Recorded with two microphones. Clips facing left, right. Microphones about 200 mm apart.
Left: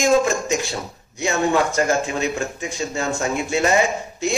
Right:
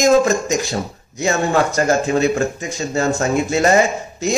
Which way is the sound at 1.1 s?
40° right (ahead or behind).